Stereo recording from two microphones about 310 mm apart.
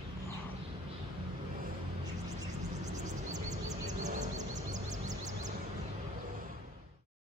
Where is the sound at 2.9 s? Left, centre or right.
Right.